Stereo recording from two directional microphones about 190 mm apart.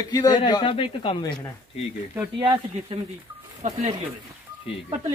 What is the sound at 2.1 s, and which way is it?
Speech, 20° right (ahead or behind).